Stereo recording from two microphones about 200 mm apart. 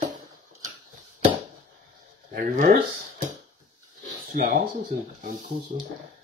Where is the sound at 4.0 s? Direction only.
45° right (ahead or behind).